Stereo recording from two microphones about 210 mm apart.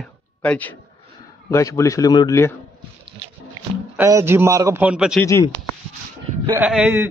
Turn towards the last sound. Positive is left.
turn(degrees=-5)  # may be behind; listen again after turning